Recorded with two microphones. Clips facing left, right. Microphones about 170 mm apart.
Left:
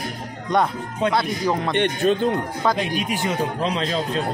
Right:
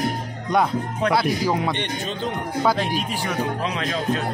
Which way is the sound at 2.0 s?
55° left (ahead or behind).